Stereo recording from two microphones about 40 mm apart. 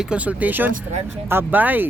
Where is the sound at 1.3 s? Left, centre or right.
Right.